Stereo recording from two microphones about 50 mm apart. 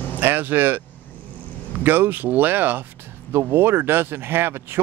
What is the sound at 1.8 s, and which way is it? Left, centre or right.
Speech, right.